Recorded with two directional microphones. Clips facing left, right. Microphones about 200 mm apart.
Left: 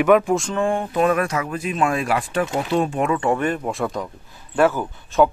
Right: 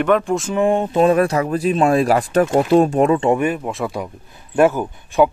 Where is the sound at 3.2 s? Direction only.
20° right (ahead or behind).